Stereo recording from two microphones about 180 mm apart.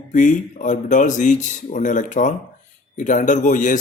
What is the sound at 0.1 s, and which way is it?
Speech, 45° left (ahead or behind).